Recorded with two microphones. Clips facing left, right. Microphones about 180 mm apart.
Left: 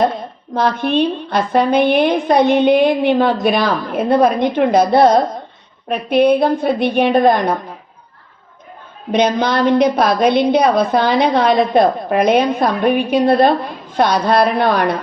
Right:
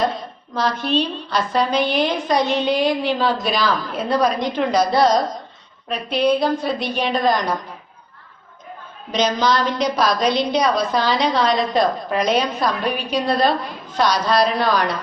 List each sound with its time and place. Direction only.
0.5 s a woman's voice: 55° left (ahead or behind)
9.1 s a woman's voice: 55° left (ahead or behind)